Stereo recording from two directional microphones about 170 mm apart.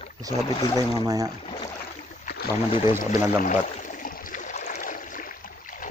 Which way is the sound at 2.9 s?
50° left (ahead or behind).